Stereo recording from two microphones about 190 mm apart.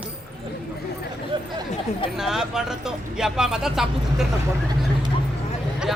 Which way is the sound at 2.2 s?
Centre (ahead or behind).